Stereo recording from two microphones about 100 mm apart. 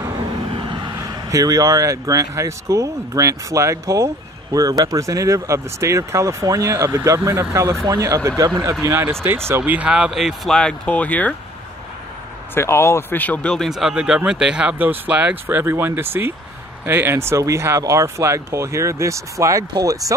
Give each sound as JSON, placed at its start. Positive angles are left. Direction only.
{"t": 0.2, "sound": "vehicle", "side_deg": -50}
{"t": 0.9, "sound": "speech", "side_deg": -35}
{"t": 8.8, "sound": "speech", "side_deg": -25}
{"t": 9.6, "sound": "speech", "side_deg": -10}
{"t": 12.5, "sound": "speech", "side_deg": 25}
{"t": 13.7, "sound": "speech", "side_deg": -5}